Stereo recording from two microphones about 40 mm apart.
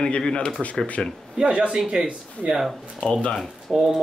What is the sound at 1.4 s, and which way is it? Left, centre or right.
Speech, right.